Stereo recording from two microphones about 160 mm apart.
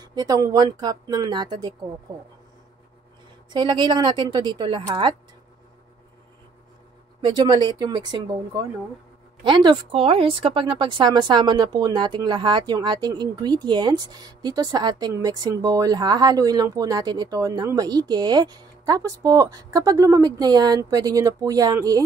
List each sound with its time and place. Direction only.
0.0 s speech: 25° right (ahead or behind)
3.5 s speech: 30° right (ahead or behind)
7.2 s speech: 30° right (ahead or behind)